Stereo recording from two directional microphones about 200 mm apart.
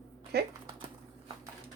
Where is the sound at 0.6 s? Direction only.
25° right (ahead or behind).